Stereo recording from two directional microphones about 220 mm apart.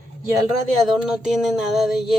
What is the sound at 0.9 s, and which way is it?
Music, 5° right (ahead or behind).